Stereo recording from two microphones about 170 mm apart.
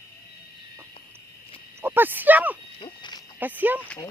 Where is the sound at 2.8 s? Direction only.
25° left (ahead or behind).